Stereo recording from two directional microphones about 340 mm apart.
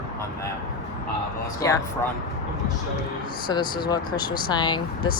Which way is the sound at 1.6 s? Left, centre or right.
Centre.